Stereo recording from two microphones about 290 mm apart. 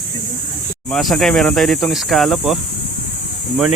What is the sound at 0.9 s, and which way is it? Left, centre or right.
Speech, centre.